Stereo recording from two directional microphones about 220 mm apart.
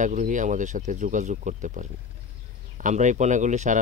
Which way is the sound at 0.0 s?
35° right (ahead or behind).